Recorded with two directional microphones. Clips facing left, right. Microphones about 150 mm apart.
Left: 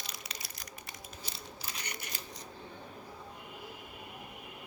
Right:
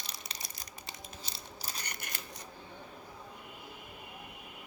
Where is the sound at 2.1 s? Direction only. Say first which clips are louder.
Even; 55° right (ahead or behind).